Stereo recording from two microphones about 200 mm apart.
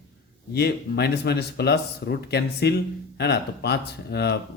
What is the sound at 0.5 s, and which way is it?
Speech, 55° left (ahead or behind).